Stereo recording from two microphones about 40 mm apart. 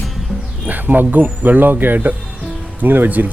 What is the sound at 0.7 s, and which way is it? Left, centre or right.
Speech, right.